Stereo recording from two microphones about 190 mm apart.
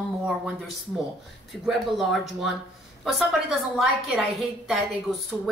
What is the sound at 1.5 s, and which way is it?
A woman's voice, centre (ahead or behind).